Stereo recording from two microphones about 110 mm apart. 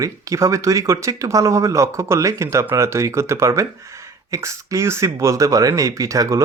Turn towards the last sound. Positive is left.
turn(degrees=-30)  # may be behind; listen again after turning